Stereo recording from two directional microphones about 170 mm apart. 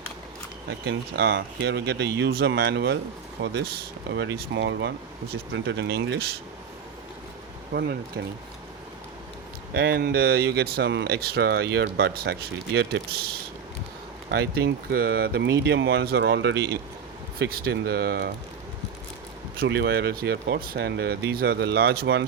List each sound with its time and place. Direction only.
0.9 s speech: 80° right
3.4 s speech: 75° right (ahead or behind)
4.4 s speech: 90° right
7.7 s speech: 70° right (ahead or behind)
9.7 s speech: 65° right (ahead or behind); by 16.6 s 90° right
17.4 s speech: 65° right (ahead or behind)
19.5 s speech: 75° right (ahead or behind)